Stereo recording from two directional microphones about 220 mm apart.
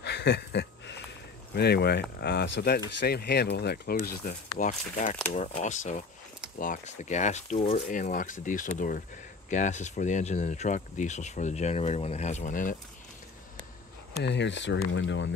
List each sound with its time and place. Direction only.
0.0 s a sound: 50° left (ahead or behind)
1.5 s speech: 45° left (ahead or behind)
14.2 s speech: 50° left (ahead or behind)